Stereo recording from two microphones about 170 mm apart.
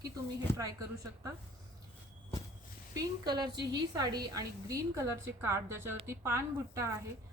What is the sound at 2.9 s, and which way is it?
A woman's voice, 25° right (ahead or behind).